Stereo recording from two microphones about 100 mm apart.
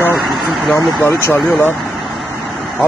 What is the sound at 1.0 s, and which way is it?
Speech, 25° left (ahead or behind).